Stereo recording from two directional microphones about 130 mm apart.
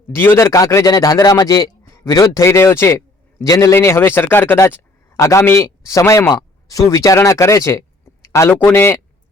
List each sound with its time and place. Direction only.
0.1 s speech: 20° left (ahead or behind)